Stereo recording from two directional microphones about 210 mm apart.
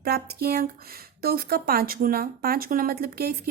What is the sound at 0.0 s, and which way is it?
Speech, 50° right (ahead or behind).